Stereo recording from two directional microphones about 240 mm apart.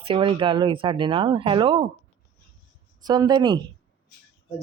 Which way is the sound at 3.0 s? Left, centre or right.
Centre.